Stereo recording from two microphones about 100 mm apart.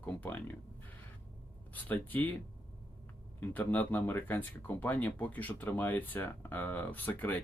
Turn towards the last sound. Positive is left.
turn(degrees=15)  # may be behind; listen again after turning